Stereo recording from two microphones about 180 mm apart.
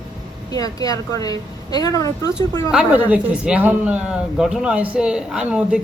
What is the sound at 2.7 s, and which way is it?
A man's voice, 5° right (ahead or behind).